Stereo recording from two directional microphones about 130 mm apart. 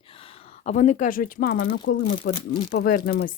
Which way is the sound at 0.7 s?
65° left (ahead or behind).